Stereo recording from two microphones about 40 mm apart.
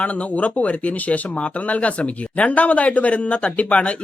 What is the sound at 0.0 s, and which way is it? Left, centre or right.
Speech, left.